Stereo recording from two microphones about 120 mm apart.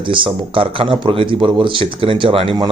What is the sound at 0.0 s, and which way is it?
Speech, 45° right (ahead or behind).